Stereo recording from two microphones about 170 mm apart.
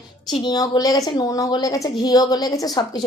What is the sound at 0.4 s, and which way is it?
A woman's voice, 25° left (ahead or behind).